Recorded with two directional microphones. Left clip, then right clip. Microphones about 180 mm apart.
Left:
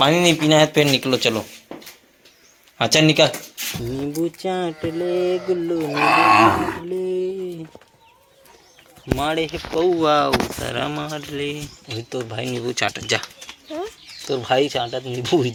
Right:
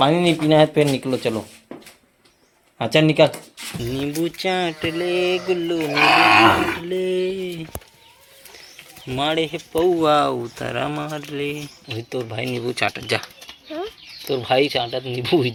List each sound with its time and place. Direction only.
0.0 s speech: 15° right (ahead or behind)
2.7 s speech: 5° right (ahead or behind)
5.9 s speech: 65° left (ahead or behind)
6.9 s a sound: 5° right (ahead or behind)
9.1 s speech: 10° right (ahead or behind)
14.3 s speech: 5° right (ahead or behind)